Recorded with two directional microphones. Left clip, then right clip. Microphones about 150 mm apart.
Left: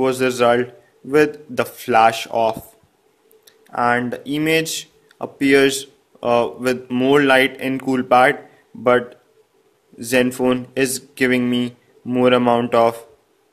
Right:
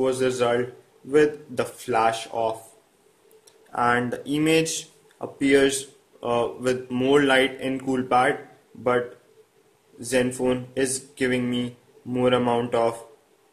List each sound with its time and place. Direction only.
0.0 s speech: 40° left (ahead or behind)
3.4 s speech: 20° left (ahead or behind)
9.9 s speech: 40° left (ahead or behind)